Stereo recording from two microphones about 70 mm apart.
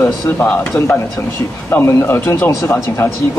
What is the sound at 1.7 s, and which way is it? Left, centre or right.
Speech, left.